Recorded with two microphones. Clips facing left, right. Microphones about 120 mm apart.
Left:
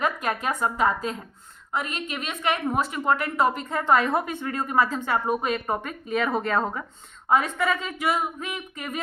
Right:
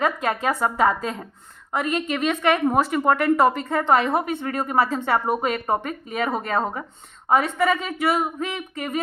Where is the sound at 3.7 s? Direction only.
25° right (ahead or behind).